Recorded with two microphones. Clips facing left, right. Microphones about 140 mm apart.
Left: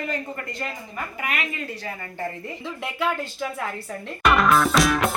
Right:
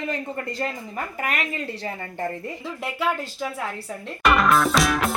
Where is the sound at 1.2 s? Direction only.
40° right (ahead or behind).